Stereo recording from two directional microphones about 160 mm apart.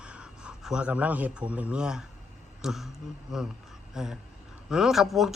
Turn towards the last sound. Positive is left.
turn(degrees=0)  # may be behind; listen again after turning